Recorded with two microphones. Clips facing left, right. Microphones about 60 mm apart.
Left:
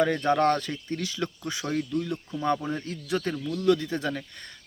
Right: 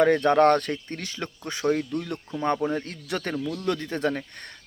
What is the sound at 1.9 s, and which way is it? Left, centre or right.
Speech, right.